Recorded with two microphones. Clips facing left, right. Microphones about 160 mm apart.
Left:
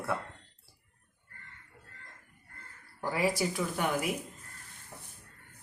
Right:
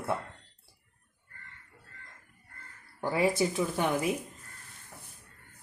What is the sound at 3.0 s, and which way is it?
Speech, 25° right (ahead or behind).